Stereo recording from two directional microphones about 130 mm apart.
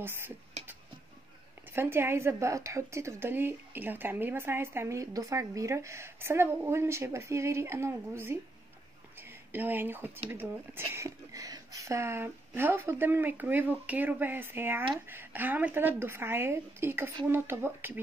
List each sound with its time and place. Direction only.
0.0 s speech: 15° right (ahead or behind)
1.7 s a woman's voice: 15° right (ahead or behind)